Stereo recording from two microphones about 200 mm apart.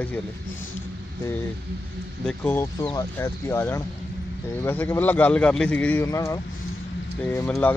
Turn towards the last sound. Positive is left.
turn(degrees=10)  # may be behind; listen again after turning